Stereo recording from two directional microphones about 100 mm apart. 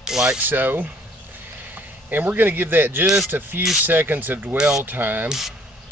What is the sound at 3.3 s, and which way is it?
Speech, 20° right (ahead or behind).